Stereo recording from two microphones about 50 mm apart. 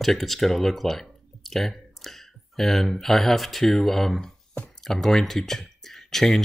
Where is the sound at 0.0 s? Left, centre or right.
Centre.